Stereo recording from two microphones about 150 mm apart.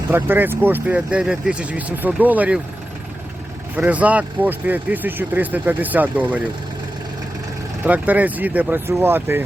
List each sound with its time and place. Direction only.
0.1 s speech: 15° right (ahead or behind)
3.8 s speech: 10° right (ahead or behind)
7.9 s speech: 10° right (ahead or behind)